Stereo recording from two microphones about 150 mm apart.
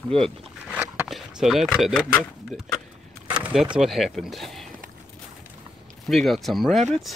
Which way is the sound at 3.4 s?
5° right (ahead or behind).